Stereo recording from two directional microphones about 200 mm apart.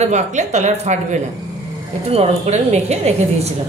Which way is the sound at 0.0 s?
35° right (ahead or behind).